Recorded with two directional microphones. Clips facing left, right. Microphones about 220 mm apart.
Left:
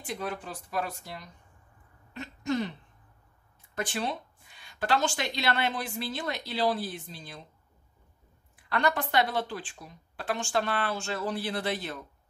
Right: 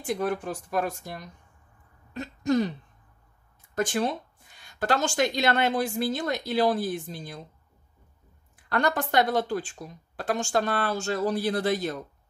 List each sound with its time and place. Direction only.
0.0 s speech: 45° right (ahead or behind)
2.1 s throat clearing: 40° right (ahead or behind)
3.7 s speech: 45° right (ahead or behind)
8.6 s speech: 45° right (ahead or behind)